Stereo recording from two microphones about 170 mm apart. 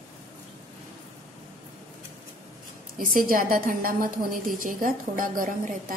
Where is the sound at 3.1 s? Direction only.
55° right (ahead or behind).